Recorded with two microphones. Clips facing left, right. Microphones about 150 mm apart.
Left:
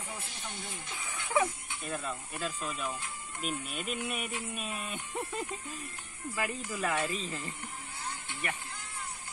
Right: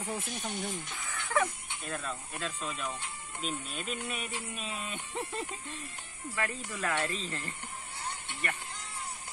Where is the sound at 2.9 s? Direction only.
30° right (ahead or behind).